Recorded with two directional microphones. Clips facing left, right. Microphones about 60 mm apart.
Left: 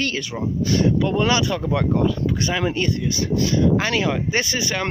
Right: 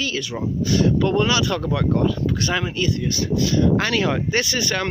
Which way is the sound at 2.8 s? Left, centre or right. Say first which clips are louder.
Even; left.